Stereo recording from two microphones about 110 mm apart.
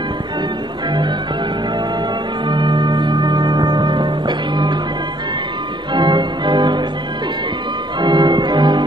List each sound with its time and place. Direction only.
2.4 s music: 45° right (ahead or behind)
5.9 s music: 45° right (ahead or behind)
8.0 s organ: 40° right (ahead or behind)